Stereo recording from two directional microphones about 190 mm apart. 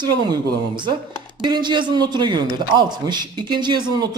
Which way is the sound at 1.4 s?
25° right (ahead or behind).